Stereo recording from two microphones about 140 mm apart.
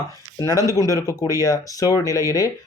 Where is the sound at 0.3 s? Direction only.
25° left (ahead or behind).